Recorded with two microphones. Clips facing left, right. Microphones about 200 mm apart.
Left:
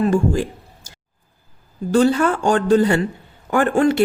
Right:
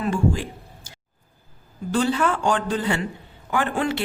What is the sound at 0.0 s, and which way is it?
Speech, 40° left (ahead or behind).